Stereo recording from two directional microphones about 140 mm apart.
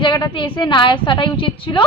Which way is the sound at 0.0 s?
35° left (ahead or behind).